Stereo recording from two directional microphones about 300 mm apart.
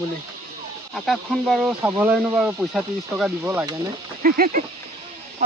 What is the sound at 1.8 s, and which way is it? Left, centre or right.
Speech, centre.